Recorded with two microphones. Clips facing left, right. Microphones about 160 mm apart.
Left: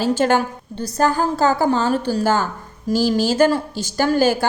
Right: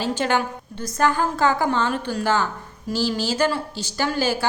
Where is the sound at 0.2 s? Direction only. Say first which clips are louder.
Left 5 dB; 45° left (ahead or behind).